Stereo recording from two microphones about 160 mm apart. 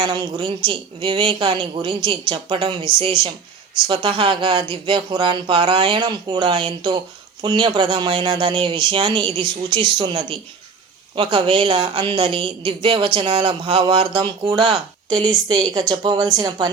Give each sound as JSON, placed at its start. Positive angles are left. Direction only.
{"t": 0.0, "sound": "a woman's voice", "side_deg": -25}